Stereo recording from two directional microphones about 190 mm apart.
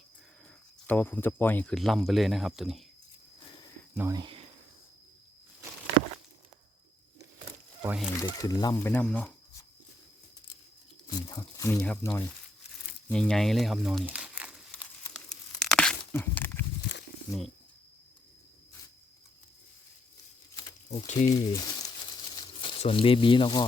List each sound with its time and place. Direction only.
0.9 s speech: 10° left (ahead or behind)
3.9 s speech: 15° right (ahead or behind)
7.8 s speech: 5° right (ahead or behind)
8.1 s speech: 20° left (ahead or behind)
11.1 s speech: 20° left (ahead or behind)
13.1 s crumpling: 5° left (ahead or behind)
15.0 s tearing: 5° left (ahead or behind)
20.6 s a sound: 35° left (ahead or behind)
21.2 s speech: 20° left (ahead or behind)